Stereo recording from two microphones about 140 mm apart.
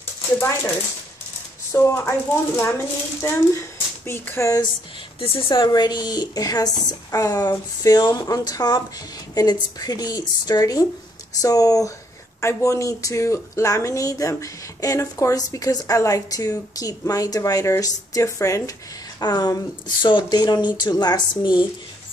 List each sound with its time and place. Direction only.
1.7 s speech: 20° left (ahead or behind)
5.2 s speech: 40° left (ahead or behind)